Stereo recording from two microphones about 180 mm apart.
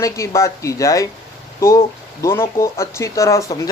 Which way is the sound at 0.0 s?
15° left (ahead or behind).